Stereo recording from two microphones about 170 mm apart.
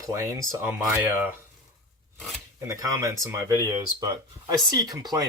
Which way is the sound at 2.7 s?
20° right (ahead or behind).